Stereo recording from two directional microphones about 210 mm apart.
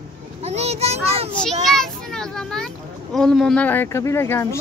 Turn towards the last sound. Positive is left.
turn(degrees=10)  # may be behind; listen again after turning